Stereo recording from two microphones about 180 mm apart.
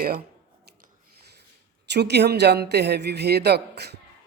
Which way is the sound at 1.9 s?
70° right (ahead or behind).